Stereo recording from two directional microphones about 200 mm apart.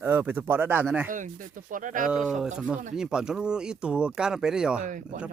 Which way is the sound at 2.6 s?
5° right (ahead or behind).